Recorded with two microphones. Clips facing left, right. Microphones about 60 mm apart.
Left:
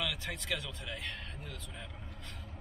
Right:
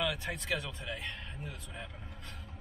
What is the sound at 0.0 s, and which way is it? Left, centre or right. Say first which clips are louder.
Speech: right 3 dB; centre.